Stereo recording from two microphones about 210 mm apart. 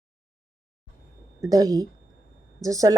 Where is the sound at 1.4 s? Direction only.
15° right (ahead or behind).